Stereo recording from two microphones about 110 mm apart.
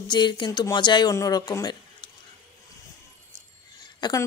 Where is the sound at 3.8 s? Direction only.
40° left (ahead or behind).